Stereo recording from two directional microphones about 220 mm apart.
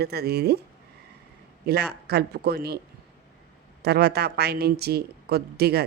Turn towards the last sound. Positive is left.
turn(degrees=-45)  # may be behind; listen again after turning